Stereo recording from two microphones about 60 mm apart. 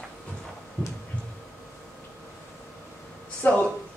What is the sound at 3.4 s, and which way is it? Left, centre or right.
Speech, left.